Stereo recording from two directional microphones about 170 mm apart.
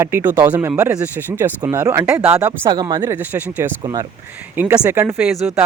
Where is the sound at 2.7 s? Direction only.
25° right (ahead or behind).